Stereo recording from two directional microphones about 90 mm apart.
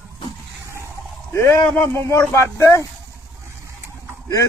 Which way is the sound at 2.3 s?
30° left (ahead or behind).